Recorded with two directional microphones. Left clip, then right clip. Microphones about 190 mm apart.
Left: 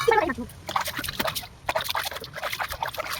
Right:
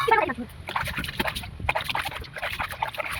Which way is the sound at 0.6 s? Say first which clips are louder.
Left 1 dB; 25° left (ahead or behind).